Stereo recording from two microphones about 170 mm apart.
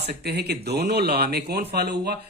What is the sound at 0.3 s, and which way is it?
Speech, 75° right (ahead or behind).